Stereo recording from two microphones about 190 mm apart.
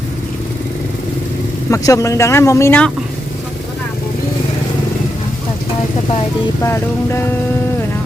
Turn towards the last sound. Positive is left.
turn(degrees=15)  # may be behind; listen again after turning